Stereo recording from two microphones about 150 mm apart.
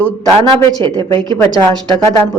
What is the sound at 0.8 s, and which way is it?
Speech, 30° right (ahead or behind).